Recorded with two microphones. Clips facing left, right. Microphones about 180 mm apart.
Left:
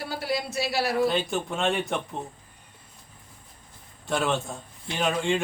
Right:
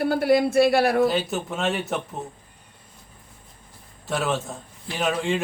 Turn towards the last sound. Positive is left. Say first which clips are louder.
# right 1 dB
turn(degrees=0)  # may be behind; listen again after turning